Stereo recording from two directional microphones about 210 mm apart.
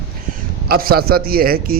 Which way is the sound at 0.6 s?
45° right (ahead or behind).